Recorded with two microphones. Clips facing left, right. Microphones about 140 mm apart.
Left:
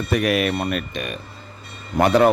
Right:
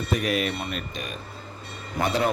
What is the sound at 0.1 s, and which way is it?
Speech, 70° left (ahead or behind).